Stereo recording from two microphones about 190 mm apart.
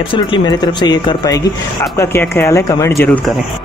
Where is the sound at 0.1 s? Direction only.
25° left (ahead or behind).